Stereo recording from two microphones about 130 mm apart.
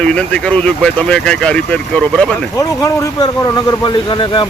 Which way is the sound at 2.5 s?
30° left (ahead or behind).